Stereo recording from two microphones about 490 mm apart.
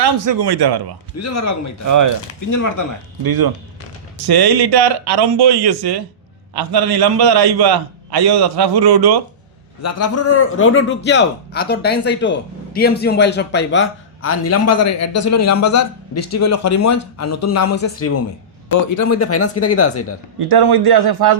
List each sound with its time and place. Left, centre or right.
0.2 s a man's voice: right
1.1 s speech: left
3.2 s a man's voice: right
9.8 s a man's voice: left
20.5 s a man's voice: right